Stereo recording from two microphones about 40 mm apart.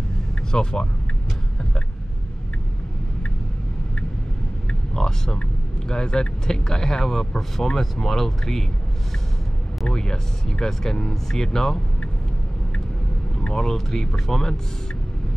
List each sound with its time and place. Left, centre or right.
0.5 s speech: centre
4.9 s speech: centre
9.8 s speech: centre
13.4 s speech: centre
13.7 s speech: centre